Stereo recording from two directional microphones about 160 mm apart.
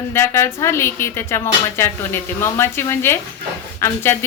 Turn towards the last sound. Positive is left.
turn(degrees=15)  # may be behind; listen again after turning